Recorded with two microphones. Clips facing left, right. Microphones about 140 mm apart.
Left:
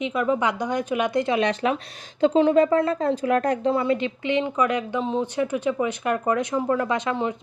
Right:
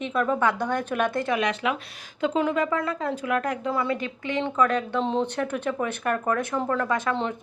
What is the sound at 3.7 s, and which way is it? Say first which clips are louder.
A woman's voice: left 4 dB; 25° left (ahead or behind).